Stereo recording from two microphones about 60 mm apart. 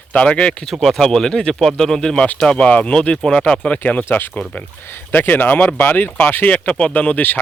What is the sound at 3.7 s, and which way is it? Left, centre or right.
Speech, left.